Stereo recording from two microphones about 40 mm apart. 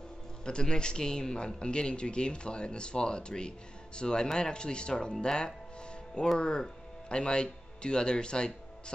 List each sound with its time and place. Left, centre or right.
0.5 s speech: left